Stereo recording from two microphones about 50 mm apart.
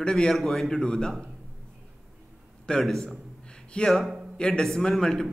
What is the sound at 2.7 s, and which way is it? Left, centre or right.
A man's voice, centre.